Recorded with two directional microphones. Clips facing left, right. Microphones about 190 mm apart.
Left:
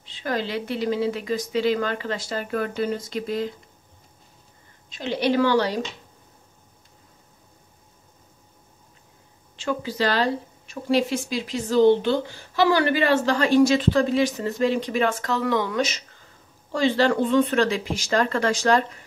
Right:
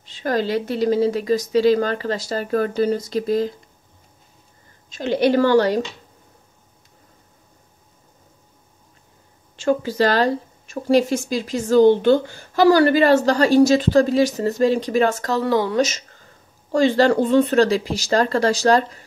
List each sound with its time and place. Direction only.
0.0 s speech: 45° right (ahead or behind)
4.8 s a woman's voice: 45° right (ahead or behind)
9.6 s speech: 45° right (ahead or behind)